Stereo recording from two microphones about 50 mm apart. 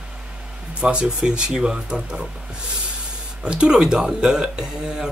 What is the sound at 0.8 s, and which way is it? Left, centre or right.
Speech, centre.